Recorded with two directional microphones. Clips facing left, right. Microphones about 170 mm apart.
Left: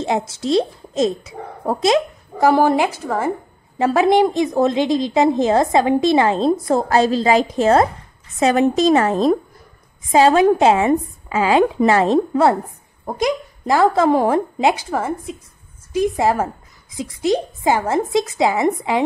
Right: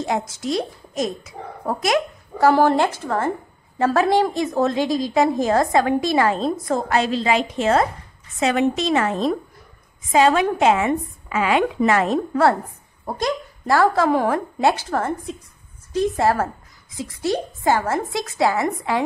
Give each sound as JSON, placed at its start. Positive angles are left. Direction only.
{"t": 0.0, "sound": "speech", "side_deg": 25}
{"t": 2.4, "sound": "a woman's voice", "side_deg": 15}
{"t": 6.7, "sound": "a woman's voice", "side_deg": 35}